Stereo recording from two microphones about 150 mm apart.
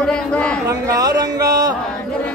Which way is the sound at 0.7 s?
25° right (ahead or behind).